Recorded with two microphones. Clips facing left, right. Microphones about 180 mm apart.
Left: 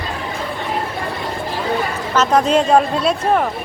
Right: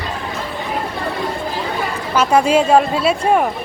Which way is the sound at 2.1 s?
10° right (ahead or behind).